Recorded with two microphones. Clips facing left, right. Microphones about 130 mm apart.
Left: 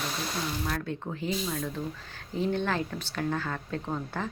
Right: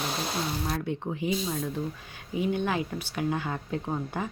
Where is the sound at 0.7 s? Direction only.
15° right (ahead or behind).